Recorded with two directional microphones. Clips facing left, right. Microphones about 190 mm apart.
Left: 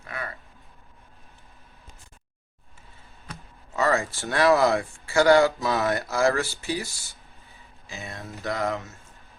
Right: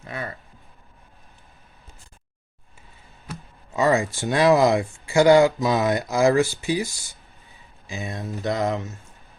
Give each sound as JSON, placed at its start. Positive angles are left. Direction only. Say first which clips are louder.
{"t": 0.0, "sound": "speech", "louder": "right 3 dB", "side_deg": -25}
{"t": 3.2, "sound": "speech", "louder": "right 5 dB", "side_deg": -15}